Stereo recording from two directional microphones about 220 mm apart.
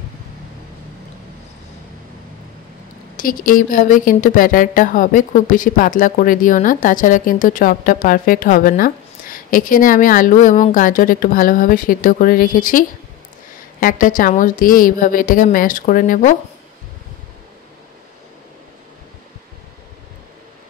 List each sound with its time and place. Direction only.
3.2 s speech: 40° left (ahead or behind)